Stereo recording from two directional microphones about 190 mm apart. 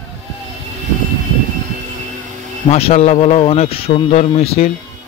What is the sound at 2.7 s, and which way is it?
Speech, 30° left (ahead or behind).